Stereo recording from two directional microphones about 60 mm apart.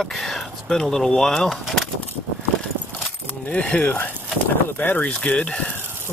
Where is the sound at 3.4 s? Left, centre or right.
Left.